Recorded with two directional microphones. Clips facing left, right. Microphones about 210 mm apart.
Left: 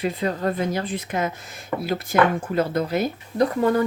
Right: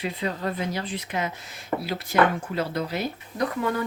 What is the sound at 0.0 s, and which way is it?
Speech, 45° left (ahead or behind).